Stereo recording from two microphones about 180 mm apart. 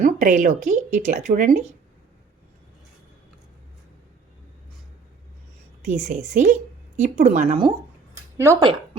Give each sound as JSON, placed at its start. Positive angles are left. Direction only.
{"t": 0.0, "sound": "a woman's voice", "side_deg": -45}
{"t": 5.8, "sound": "a woman's voice", "side_deg": -45}
{"t": 8.4, "sound": "speech", "side_deg": -15}